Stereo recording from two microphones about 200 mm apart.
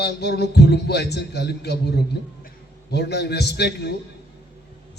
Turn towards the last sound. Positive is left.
turn(degrees=55)  # may be behind; listen again after turning